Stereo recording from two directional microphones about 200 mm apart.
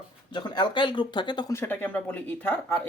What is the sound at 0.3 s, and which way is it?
Speech, 20° left (ahead or behind).